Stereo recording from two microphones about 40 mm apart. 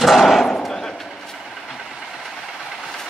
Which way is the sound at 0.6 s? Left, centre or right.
Centre.